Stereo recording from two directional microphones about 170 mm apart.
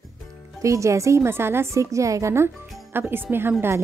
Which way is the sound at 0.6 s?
20° right (ahead or behind).